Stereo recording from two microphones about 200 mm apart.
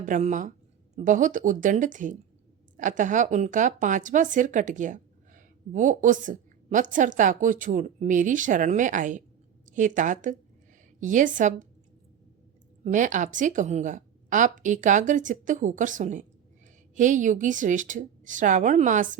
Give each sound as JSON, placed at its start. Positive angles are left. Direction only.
{"t": 0.0, "sound": "speech", "side_deg": -40}
{"t": 12.8, "sound": "speech", "side_deg": -40}